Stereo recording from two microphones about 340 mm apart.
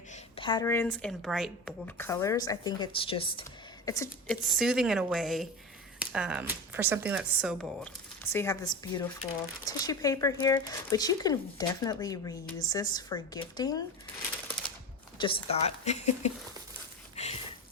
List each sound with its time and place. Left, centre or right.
0.1 s speech: centre
15.2 s a woman's voice: centre
17.2 s a sound: centre